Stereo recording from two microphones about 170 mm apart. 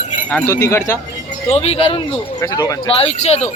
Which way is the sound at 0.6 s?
15° left (ahead or behind).